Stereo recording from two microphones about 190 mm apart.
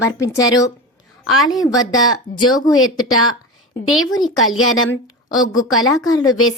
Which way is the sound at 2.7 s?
90° left.